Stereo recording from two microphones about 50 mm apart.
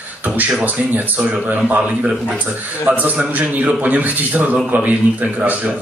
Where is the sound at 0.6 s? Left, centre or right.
Right.